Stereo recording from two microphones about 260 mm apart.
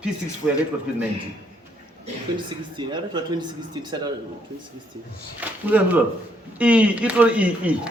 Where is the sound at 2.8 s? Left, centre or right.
Centre.